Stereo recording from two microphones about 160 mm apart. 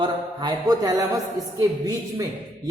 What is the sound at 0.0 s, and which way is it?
Speech, 25° right (ahead or behind).